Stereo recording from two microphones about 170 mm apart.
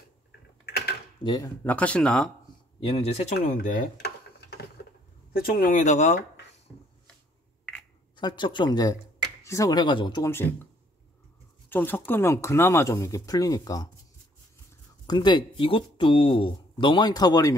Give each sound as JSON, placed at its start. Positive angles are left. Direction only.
{"t": 0.7, "sound": "mechanisms", "side_deg": 70}
{"t": 1.2, "sound": "speech", "side_deg": 25}
{"t": 1.6, "sound": "speech", "side_deg": 10}
{"t": 2.8, "sound": "speech", "side_deg": 30}
{"t": 3.3, "sound": "a sound", "side_deg": 65}
{"t": 5.6, "sound": "speech", "side_deg": 50}
{"t": 8.2, "sound": "speech", "side_deg": 25}
{"t": 11.7, "sound": "speech", "side_deg": 10}
{"t": 15.0, "sound": "speech", "side_deg": 25}